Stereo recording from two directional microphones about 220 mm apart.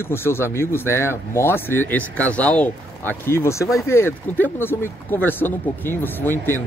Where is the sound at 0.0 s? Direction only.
10° left (ahead or behind).